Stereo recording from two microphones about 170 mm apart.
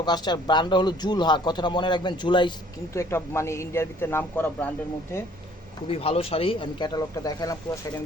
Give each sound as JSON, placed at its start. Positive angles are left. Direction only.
{"t": 0.0, "sound": "speech", "side_deg": 25}
{"t": 2.9, "sound": "a man's voice", "side_deg": 15}
{"t": 5.9, "sound": "speech", "side_deg": 35}